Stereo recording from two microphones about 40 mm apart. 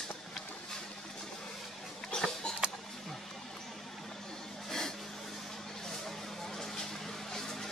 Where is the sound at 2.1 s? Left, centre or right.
Centre.